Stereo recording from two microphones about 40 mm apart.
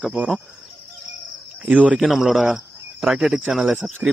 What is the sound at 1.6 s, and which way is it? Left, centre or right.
Speech, right.